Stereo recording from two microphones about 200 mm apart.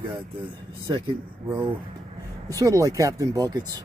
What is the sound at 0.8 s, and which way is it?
Speech, 20° right (ahead or behind).